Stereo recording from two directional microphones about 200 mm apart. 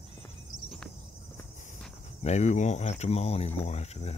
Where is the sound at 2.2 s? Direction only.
35° left (ahead or behind).